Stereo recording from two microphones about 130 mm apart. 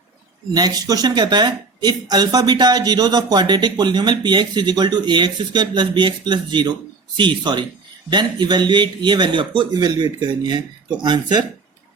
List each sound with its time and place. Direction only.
0.5 s speech: 30° right (ahead or behind)